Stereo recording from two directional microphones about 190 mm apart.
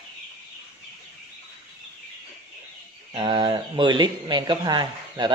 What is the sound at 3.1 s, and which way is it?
Speech, 25° right (ahead or behind).